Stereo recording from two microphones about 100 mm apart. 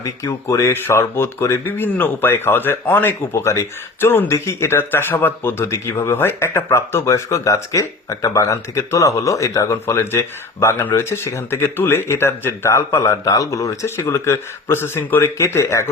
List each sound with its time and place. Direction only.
0.0 s speech: 30° left (ahead or behind)